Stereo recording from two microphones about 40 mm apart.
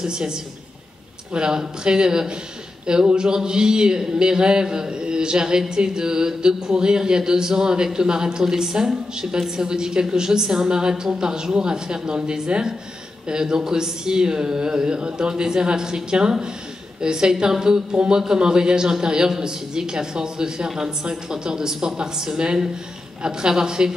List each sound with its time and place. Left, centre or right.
0.0 s a woman's voice: centre